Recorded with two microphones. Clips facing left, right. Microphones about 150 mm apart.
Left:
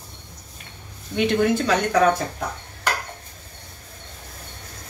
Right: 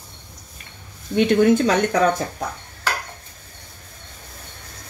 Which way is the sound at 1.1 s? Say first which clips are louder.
Right 4 dB; 50° right (ahead or behind).